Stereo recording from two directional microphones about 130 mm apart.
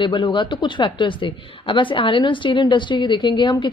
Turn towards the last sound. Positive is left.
turn(degrees=35)  # may be behind; listen again after turning